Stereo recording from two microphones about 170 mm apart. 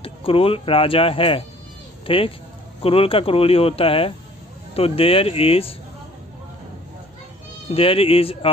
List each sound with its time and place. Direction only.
0.0 s speech: 35° left (ahead or behind)
7.7 s speech: 35° left (ahead or behind)